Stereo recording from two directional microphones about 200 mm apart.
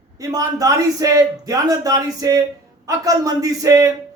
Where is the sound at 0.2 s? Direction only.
15° right (ahead or behind).